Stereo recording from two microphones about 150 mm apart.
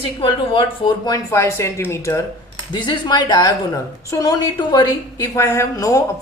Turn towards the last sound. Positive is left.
turn(degrees=20)  # may be behind; listen again after turning